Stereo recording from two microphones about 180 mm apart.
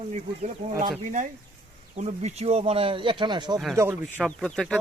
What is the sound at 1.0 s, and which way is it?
Speech, 45° right (ahead or behind).